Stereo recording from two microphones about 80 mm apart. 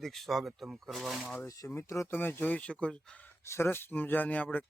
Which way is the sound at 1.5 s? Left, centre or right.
Left.